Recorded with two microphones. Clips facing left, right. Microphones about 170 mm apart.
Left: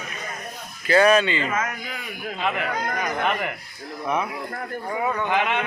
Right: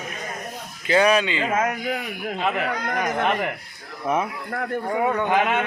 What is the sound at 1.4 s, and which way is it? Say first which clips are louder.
Speech: right 4 dB; 60° right (ahead or behind).